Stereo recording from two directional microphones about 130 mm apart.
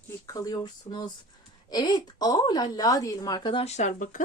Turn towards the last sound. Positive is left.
turn(degrees=80)